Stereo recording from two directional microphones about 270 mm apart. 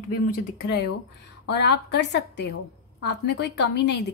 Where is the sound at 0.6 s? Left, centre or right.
Left.